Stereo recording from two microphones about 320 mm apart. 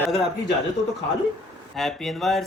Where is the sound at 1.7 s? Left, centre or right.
Centre.